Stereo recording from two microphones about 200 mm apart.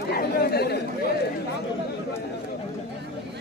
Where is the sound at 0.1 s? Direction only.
50° left (ahead or behind).